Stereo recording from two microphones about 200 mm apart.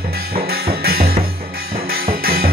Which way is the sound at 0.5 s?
50° right (ahead or behind).